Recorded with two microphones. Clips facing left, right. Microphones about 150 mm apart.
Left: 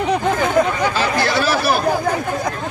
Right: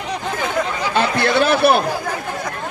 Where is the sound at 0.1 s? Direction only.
50° left (ahead or behind).